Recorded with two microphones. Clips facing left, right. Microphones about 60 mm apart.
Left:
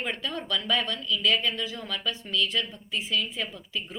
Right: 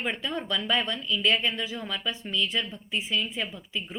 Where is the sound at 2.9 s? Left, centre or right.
Right.